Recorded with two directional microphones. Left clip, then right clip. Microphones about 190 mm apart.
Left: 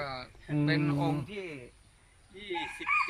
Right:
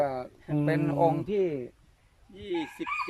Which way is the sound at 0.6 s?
50° right (ahead or behind).